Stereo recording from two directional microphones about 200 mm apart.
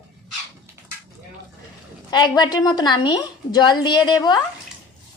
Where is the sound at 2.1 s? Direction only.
20° left (ahead or behind).